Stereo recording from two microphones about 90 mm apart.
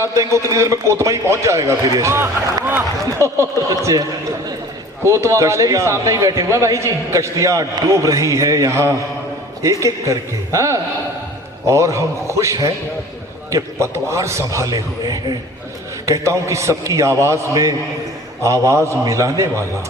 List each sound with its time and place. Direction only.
0.0 s speech: 35° right (ahead or behind)
3.7 s speech: 40° right (ahead or behind)
5.0 s speech: 35° right (ahead or behind)
16.0 s speech: 35° right (ahead or behind)